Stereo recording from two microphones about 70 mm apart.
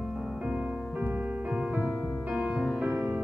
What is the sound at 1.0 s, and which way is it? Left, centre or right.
Music, centre.